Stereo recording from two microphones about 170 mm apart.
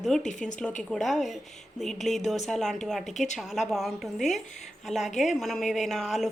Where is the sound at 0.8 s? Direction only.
Centre (ahead or behind).